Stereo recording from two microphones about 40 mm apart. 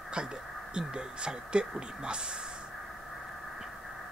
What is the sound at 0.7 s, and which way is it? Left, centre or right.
Speech, right.